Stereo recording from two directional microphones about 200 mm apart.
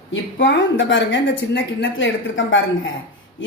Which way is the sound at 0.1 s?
65° left (ahead or behind).